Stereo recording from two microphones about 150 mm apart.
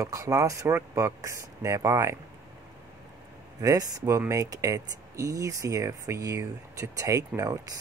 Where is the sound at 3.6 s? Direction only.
25° right (ahead or behind).